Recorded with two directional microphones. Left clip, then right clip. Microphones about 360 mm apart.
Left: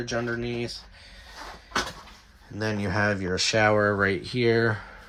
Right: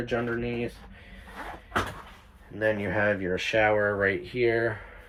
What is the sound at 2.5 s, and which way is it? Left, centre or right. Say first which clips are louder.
Speech: right 1 dB; centre.